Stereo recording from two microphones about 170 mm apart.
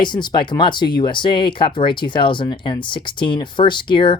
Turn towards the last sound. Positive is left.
turn(degrees=30)  # may be behind; listen again after turning